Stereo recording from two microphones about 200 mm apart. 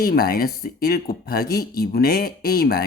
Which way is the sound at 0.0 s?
50° left (ahead or behind).